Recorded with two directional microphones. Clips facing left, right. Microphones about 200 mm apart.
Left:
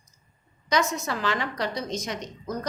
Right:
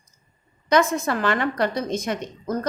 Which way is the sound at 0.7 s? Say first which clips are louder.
Right 6 dB; 55° right (ahead or behind).